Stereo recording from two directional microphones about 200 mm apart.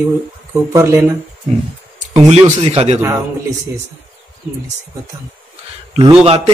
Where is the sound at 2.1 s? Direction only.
30° right (ahead or behind).